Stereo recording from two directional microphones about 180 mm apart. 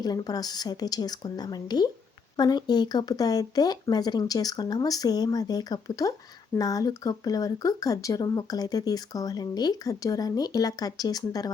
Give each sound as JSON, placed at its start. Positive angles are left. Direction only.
{"t": 0.0, "sound": "speech", "side_deg": 20}